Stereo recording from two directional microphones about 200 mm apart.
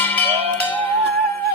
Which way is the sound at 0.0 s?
10° left (ahead or behind).